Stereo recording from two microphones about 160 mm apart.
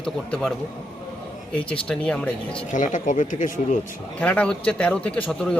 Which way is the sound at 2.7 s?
50° left (ahead or behind).